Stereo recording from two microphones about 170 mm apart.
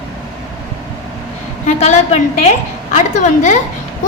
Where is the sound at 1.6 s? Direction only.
40° left (ahead or behind).